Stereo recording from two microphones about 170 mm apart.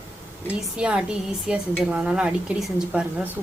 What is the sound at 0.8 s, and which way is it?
Speech, 5° right (ahead or behind).